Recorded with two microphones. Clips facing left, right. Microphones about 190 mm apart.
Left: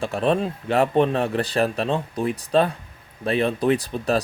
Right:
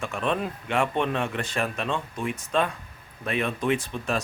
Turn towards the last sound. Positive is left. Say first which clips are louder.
# left 5 dB
turn(degrees=35)  # may be behind; listen again after turning